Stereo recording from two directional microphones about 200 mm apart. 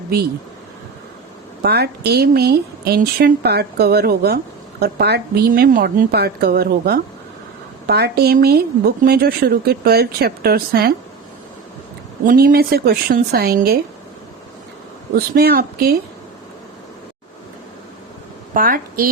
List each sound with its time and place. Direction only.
1.6 s a woman's voice: 55° right (ahead or behind)
12.2 s a woman's voice: 45° right (ahead or behind)
15.1 s a woman's voice: 50° right (ahead or behind)
18.5 s a woman's voice: 45° right (ahead or behind)